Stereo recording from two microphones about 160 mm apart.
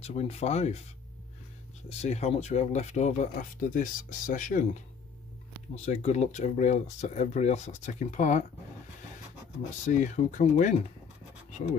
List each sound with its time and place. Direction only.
0.0 s speech: 40° left (ahead or behind)
1.9 s speech: 45° left (ahead or behind)
5.9 s speech: 40° left (ahead or behind)
9.8 s speech: 50° left (ahead or behind)